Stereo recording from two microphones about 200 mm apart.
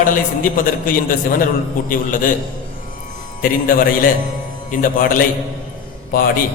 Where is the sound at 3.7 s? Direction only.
45° left (ahead or behind).